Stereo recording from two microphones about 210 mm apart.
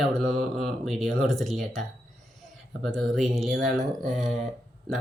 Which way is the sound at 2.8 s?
Centre (ahead or behind).